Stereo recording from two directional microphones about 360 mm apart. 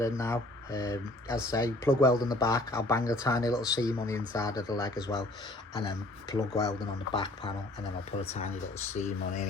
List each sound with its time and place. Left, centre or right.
0.0 s speech: centre
9.0 s speech: left